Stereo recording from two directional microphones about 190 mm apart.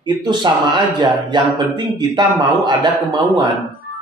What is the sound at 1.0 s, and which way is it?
A man's voice, 25° right (ahead or behind).